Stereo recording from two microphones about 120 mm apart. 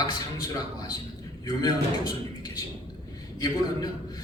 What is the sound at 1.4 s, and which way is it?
Speech, 30° left (ahead or behind).